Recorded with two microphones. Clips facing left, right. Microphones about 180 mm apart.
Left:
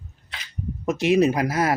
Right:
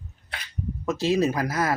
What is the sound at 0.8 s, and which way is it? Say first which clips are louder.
Speech: left 4 dB; 20° left (ahead or behind).